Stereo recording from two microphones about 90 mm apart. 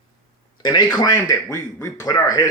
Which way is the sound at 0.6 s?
50° left (ahead or behind).